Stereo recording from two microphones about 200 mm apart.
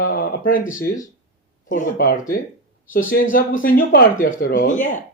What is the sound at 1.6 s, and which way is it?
Speech, 45° left (ahead or behind).